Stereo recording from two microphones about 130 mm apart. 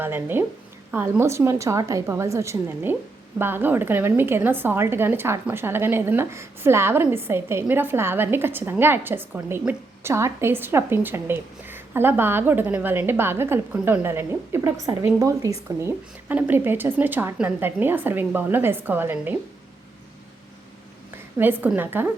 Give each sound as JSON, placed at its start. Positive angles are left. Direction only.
{"t": 0.0, "sound": "a woman's voice", "side_deg": -15}
{"t": 16.3, "sound": "a woman's voice", "side_deg": -15}
{"t": 21.3, "sound": "a woman's voice", "side_deg": -15}